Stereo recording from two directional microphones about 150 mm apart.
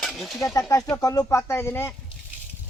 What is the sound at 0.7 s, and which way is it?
Speech, 20° left (ahead or behind).